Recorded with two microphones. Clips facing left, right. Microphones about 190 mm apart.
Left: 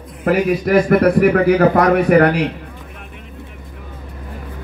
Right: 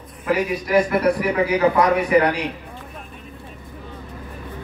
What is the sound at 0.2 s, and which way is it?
A man's voice, 55° left (ahead or behind).